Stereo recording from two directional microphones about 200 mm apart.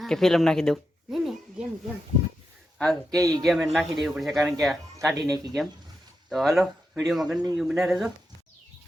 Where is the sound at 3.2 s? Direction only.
15° right (ahead or behind).